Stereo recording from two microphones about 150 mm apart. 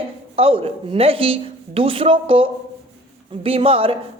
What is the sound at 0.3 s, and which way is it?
A woman's voice, 40° right (ahead or behind).